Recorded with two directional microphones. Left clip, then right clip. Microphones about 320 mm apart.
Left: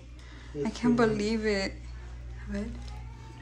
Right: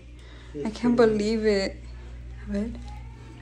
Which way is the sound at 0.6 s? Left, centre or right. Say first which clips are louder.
Right 5 dB; centre.